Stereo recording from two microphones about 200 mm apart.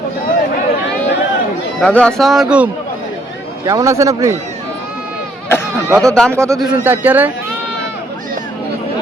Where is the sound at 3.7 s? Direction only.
15° right (ahead or behind).